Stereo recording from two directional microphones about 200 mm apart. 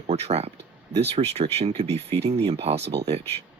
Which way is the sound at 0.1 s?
30° right (ahead or behind).